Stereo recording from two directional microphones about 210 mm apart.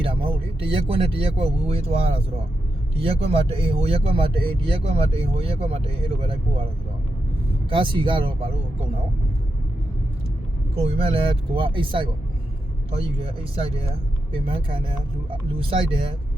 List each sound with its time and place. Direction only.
0.0 s speech: 25° right (ahead or behind)
7.7 s speech: 25° right (ahead or behind)
10.8 s speech: 25° right (ahead or behind)